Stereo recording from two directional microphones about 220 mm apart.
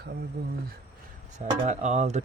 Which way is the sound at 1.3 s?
30° right (ahead or behind).